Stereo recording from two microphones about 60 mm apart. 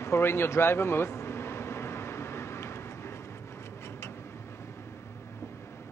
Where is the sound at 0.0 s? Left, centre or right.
Left.